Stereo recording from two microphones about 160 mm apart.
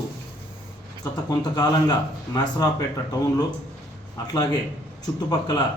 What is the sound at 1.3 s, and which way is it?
Speech, 25° left (ahead or behind).